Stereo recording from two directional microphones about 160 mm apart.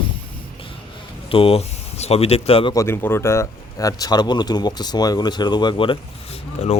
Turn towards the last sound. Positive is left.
turn(degrees=40)  # may be behind; listen again after turning